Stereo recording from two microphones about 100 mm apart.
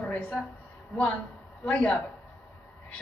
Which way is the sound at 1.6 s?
10° left (ahead or behind).